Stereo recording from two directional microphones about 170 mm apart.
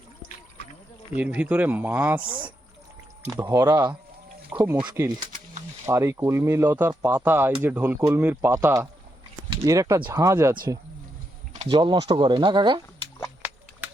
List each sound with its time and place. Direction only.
1.1 s speech: 10° right (ahead or behind)
4.4 s a sound: 10° right (ahead or behind)
4.8 s speech: 25° right (ahead or behind)
11.7 s speech: 25° right (ahead or behind)